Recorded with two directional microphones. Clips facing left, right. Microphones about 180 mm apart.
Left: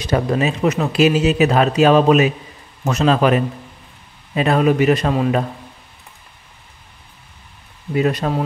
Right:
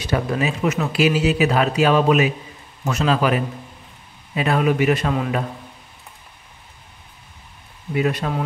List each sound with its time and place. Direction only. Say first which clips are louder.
0.0 s speech: left 4 dB; 40° left (ahead or behind)
7.9 s speech: left 3 dB; 40° left (ahead or behind)